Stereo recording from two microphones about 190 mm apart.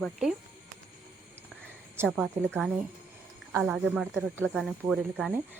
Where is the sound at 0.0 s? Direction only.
Centre (ahead or behind).